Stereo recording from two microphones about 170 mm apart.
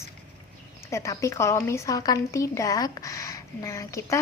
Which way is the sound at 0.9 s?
15° left (ahead or behind).